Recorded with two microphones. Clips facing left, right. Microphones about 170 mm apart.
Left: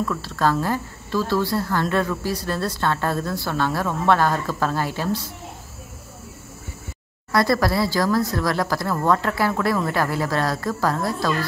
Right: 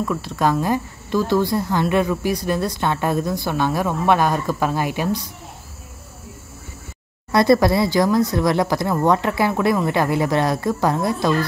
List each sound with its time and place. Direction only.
0.0 s a woman's voice: 15° right (ahead or behind)
7.3 s speech: 20° right (ahead or behind)